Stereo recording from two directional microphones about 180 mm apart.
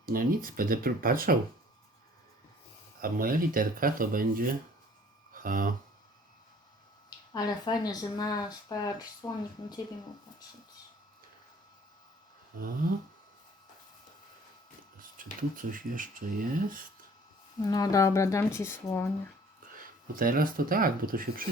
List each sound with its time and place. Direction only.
0.0 s speech: 50° right (ahead or behind)
3.0 s speech: 50° right (ahead or behind)
7.3 s speech: 20° left (ahead or behind)
12.8 s speech: 50° right (ahead or behind)
15.2 s speech: 50° right (ahead or behind)
17.7 s a woman's voice: 20° left (ahead or behind)
19.7 s speech: 50° right (ahead or behind)